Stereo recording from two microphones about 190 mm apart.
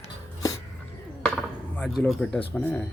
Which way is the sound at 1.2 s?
5° left (ahead or behind).